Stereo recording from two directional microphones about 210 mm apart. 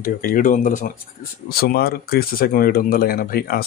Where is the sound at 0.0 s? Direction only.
40° left (ahead or behind).